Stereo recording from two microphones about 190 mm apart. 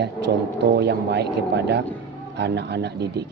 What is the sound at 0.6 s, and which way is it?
A woman's voice, 60° right (ahead or behind).